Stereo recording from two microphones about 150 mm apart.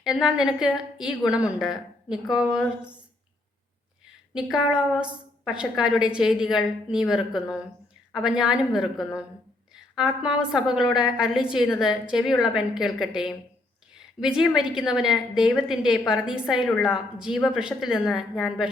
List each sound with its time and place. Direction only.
0.0 s a woman's voice: 5° right (ahead or behind)
4.4 s a woman's voice: 5° right (ahead or behind)